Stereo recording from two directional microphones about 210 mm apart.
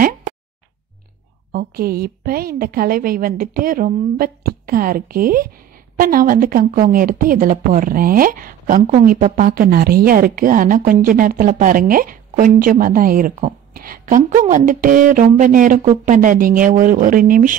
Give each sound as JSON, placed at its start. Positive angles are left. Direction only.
{"t": 1.5, "sound": "a woman's voice", "side_deg": -45}